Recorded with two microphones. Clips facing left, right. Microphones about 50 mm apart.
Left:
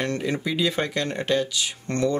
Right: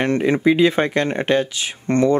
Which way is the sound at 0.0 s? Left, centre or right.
Right.